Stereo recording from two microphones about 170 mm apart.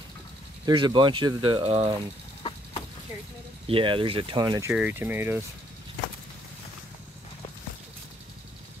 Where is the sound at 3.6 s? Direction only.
30° right (ahead or behind).